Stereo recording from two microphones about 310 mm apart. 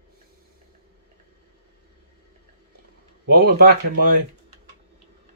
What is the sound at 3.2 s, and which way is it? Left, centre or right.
Speech, right.